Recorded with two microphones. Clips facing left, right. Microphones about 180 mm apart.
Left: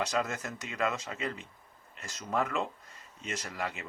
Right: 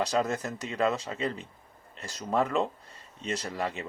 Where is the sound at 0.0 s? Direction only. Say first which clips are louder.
Right 4 dB; 35° right (ahead or behind).